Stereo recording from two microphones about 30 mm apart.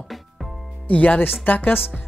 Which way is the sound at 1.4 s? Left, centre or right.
Left.